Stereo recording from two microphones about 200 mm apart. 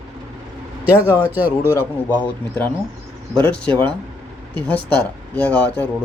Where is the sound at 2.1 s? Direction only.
10° left (ahead or behind).